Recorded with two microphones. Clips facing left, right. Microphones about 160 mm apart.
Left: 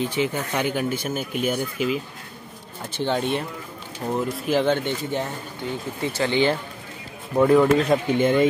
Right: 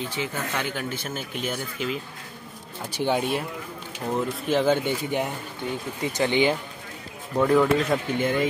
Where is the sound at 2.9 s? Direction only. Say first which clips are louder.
Left 1 dB; 10° right (ahead or behind).